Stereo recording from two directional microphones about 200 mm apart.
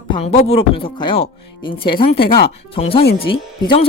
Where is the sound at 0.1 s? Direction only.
30° left (ahead or behind).